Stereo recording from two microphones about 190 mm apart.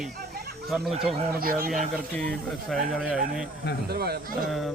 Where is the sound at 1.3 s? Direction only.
50° right (ahead or behind).